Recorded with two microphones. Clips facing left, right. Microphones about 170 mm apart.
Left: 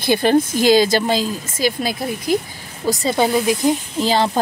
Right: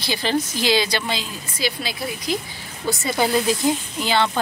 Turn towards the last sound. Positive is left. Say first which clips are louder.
# left 4 dB
turn(degrees=35)  # may be behind; listen again after turning